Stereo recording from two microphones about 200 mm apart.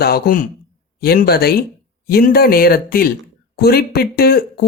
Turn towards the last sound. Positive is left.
turn(degrees=50)  # may be behind; listen again after turning